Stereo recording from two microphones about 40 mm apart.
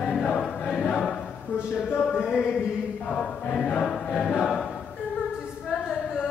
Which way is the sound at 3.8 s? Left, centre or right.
Centre.